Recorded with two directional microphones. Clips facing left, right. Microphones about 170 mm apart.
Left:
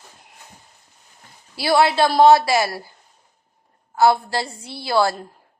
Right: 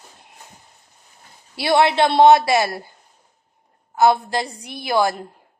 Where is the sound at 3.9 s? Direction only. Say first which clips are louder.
Even; 20° right (ahead or behind).